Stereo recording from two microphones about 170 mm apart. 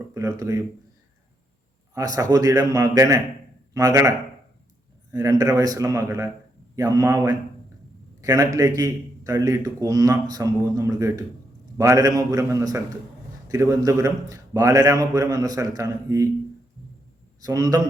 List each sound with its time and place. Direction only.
0.1 s speech: 20° right (ahead or behind)
2.0 s a man's voice: 20° right (ahead or behind)
5.1 s a man's voice: 20° right (ahead or behind)
17.4 s a man's voice: 20° right (ahead or behind)